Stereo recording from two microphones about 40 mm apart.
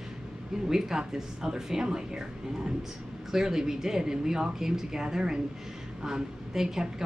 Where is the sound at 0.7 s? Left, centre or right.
Centre.